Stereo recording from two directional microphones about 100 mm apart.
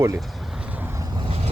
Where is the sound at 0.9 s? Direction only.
35° right (ahead or behind).